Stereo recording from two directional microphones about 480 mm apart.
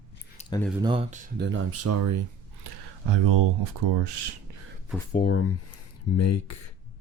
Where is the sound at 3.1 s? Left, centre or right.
Right.